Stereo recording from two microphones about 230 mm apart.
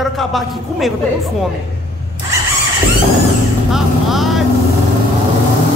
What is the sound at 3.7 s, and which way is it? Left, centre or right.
Vehicle, centre.